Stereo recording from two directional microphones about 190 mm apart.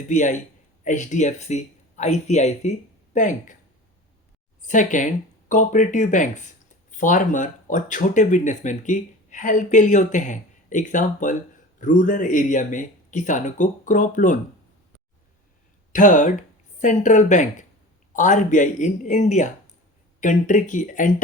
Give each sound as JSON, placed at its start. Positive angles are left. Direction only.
{"t": 0.1, "sound": "speech", "side_deg": 40}
{"t": 4.6, "sound": "speech", "side_deg": 40}
{"t": 15.9, "sound": "speech", "side_deg": 40}